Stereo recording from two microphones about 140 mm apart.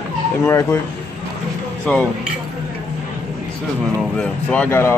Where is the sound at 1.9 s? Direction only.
10° left (ahead or behind).